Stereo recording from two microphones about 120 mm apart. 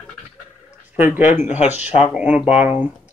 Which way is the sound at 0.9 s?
15° right (ahead or behind).